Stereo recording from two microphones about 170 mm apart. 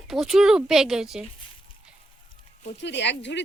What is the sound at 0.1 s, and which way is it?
Speech, centre (ahead or behind).